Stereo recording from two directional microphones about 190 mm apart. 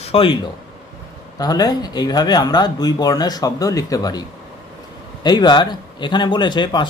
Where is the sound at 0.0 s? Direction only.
30° left (ahead or behind).